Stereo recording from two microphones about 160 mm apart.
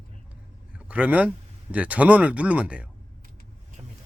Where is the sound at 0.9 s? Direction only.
10° right (ahead or behind).